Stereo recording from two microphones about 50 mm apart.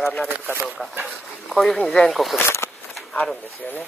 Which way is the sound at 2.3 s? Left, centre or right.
Left.